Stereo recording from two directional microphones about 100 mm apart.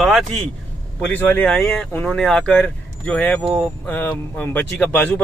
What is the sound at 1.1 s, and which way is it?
Speech, 15° left (ahead or behind).